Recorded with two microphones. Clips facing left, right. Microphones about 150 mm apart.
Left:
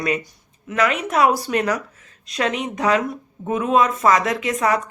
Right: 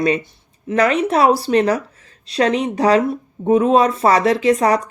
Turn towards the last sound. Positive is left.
turn(degrees=-35)  # may be behind; listen again after turning